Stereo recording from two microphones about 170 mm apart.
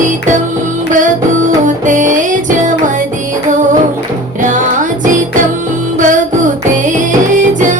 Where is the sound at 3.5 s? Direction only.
50° right (ahead or behind).